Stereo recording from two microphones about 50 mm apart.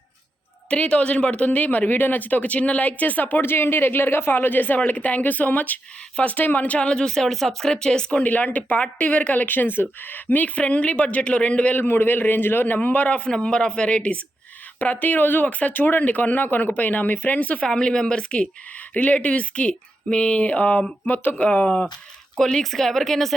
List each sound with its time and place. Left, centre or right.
0.7 s speech: left
3.4 s speech: left; by 8.2 s centre
8.2 s speech: left
13.3 s speech: centre
14.8 s speech: left
17.7 s speech: centre; by 20.8 s left
21.1 s speech: left
21.4 s speech: left
22.4 s speech: centre